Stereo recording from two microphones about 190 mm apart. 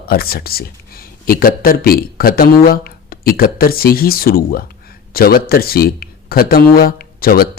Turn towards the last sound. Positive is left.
turn(degrees=50)  # may be behind; listen again after turning